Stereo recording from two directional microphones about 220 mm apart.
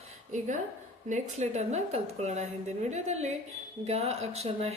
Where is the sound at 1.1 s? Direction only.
30° right (ahead or behind).